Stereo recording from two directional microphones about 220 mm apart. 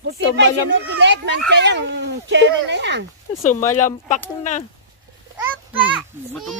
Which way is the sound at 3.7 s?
35° left (ahead or behind).